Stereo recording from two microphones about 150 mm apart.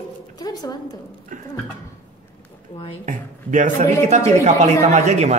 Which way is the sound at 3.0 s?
55° right (ahead or behind).